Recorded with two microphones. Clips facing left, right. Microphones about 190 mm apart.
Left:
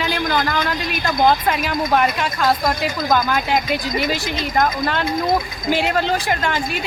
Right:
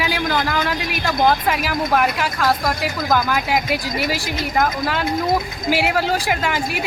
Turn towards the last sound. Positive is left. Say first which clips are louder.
# even
turn(degrees=-10)  # may be behind; listen again after turning